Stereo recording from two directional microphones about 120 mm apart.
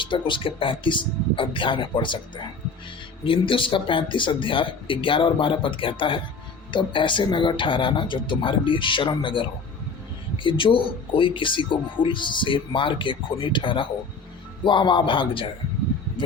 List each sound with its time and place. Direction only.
0.0 s speech: 45° left (ahead or behind)